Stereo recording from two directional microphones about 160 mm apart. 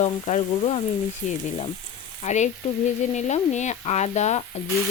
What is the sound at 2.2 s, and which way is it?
Speech, 45° left (ahead or behind).